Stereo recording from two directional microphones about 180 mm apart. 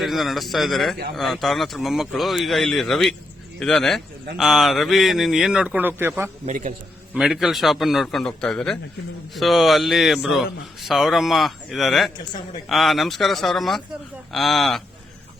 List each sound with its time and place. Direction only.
0.0 s speech: centre (ahead or behind)
6.4 s a man's voice: 40° right (ahead or behind)
7.1 s speech: centre (ahead or behind)